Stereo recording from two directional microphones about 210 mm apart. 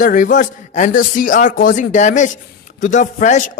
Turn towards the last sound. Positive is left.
turn(degrees=35)  # may be behind; listen again after turning